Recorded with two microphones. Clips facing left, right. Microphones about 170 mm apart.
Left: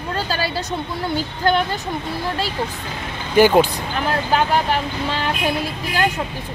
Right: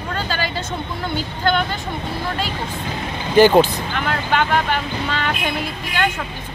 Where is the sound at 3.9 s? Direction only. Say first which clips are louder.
Left 2 dB; 35° left (ahead or behind).